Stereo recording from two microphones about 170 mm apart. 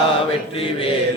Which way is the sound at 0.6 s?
30° left (ahead or behind).